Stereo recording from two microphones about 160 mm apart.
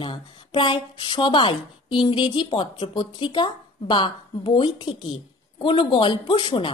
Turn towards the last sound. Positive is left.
turn(degrees=30)  # may be behind; listen again after turning